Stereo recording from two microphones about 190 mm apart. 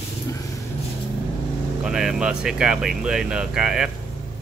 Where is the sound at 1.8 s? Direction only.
5° right (ahead or behind).